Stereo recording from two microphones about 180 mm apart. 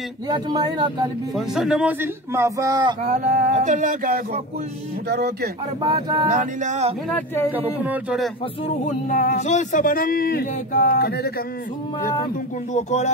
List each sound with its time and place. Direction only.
0.3 s speech: 25° right (ahead or behind)
1.3 s a man's voice: centre (ahead or behind); by 3.0 s 25° right (ahead or behind)
3.1 s a sound: 45° right (ahead or behind)
5.0 s speech: 65° right (ahead or behind)
5.8 s speech: 25° right (ahead or behind)
6.3 s a sound: 45° right (ahead or behind)
7.1 s speech: 10° left (ahead or behind)
7.8 s a man's voice: 5° right (ahead or behind)
8.8 s speech: 50° left (ahead or behind)
12.7 s speech: 40° left (ahead or behind)